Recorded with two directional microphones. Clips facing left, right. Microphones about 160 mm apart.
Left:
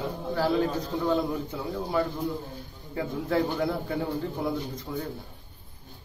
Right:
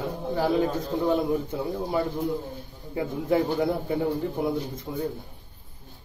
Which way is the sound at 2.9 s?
20° right (ahead or behind).